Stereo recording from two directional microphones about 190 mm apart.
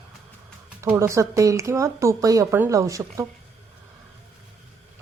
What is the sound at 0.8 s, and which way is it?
Speech, 15° right (ahead or behind).